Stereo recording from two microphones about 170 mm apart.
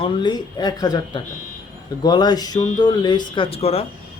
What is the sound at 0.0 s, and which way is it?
Speech, 25° left (ahead or behind).